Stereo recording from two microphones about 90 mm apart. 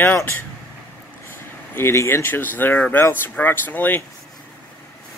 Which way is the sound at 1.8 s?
30° left (ahead or behind).